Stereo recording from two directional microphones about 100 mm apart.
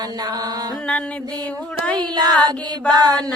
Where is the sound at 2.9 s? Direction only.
45° right (ahead or behind).